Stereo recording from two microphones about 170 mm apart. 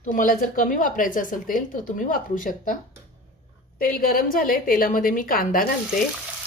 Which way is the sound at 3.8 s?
60° left (ahead or behind).